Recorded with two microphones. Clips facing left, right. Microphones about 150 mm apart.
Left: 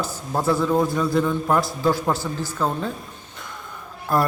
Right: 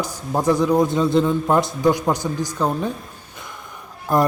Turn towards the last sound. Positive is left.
turn(degrees=-20)  # may be behind; listen again after turning